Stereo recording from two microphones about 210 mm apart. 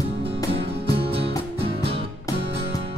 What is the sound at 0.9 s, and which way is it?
Music, 25° right (ahead or behind).